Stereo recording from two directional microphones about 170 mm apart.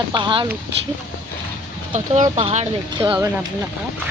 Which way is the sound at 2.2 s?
30° right (ahead or behind).